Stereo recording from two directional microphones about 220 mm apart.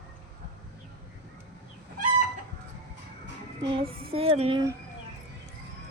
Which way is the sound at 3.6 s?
25° right (ahead or behind).